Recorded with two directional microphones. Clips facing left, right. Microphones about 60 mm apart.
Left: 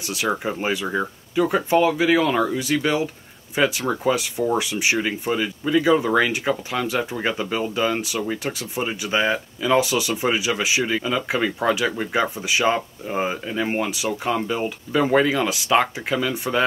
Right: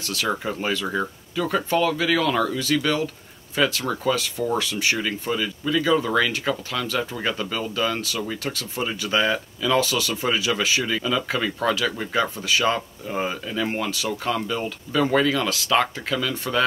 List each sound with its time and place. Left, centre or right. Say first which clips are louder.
0.0 s speech: left 2 dB; centre